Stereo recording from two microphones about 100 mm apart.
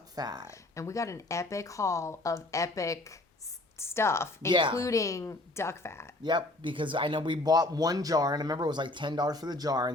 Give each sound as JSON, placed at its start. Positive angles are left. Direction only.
{"t": 0.2, "sound": "speech", "side_deg": -40}
{"t": 0.4, "sound": "a woman's voice", "side_deg": 30}
{"t": 4.5, "sound": "a woman's voice", "side_deg": -55}
{"t": 4.8, "sound": "a woman's voice", "side_deg": 35}
{"t": 6.2, "sound": "speech", "side_deg": -50}